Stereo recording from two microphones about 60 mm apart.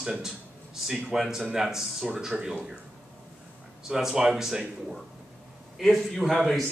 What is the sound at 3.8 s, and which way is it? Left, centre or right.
Speech, centre.